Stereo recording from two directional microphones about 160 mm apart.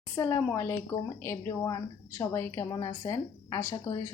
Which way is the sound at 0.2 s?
15° left (ahead or behind).